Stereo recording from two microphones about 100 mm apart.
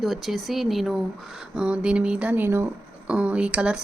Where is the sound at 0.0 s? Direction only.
Centre (ahead or behind).